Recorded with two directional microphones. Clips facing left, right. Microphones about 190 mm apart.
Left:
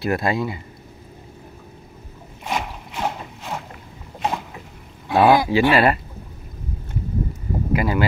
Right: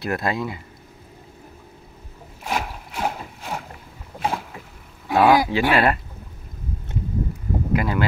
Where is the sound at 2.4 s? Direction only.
5° right (ahead or behind).